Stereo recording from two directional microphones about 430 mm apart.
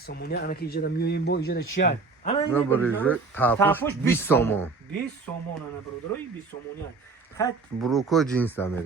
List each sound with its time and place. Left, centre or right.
0.0 s speech: left
2.5 s speech: centre
7.3 s speech: centre